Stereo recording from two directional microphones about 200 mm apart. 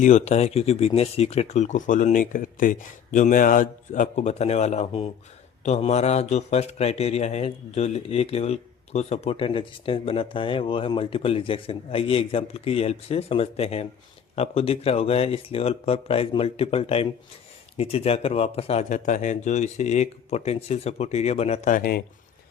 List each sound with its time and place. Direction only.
0.0 s speech: 35° left (ahead or behind)